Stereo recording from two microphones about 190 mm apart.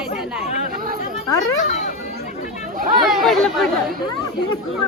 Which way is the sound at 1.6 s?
40° left (ahead or behind).